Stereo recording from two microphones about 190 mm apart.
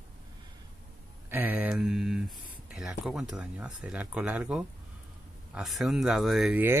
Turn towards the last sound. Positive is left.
turn(degrees=-10)  # may be behind; listen again after turning